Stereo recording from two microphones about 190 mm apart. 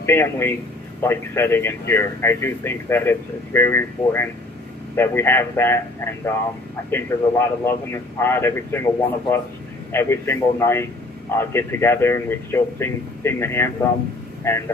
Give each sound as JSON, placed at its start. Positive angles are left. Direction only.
{"t": 0.0, "sound": "a man's voice", "side_deg": 10}